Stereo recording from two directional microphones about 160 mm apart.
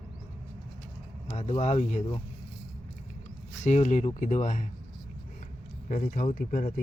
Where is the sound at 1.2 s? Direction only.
40° left (ahead or behind).